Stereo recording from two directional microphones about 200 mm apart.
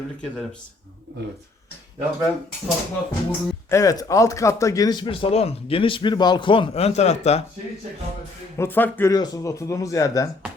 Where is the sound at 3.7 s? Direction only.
15° left (ahead or behind); by 7.4 s 35° left (ahead or behind).